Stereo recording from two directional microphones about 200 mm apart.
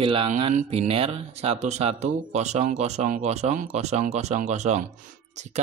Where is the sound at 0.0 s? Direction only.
25° right (ahead or behind).